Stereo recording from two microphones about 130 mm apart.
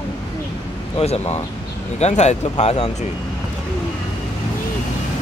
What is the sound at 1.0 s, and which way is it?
Speech, 55° left (ahead or behind).